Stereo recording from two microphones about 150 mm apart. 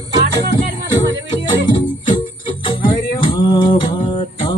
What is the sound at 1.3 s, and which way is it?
Music, 30° left (ahead or behind).